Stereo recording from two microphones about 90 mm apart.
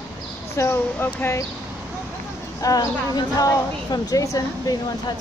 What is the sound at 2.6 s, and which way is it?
A woman's voice, 40° left (ahead or behind).